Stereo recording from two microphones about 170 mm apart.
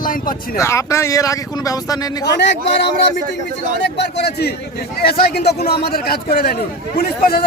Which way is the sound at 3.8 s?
80° left.